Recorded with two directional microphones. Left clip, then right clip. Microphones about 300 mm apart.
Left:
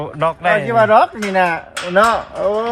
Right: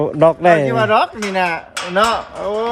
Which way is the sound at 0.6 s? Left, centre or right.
Centre.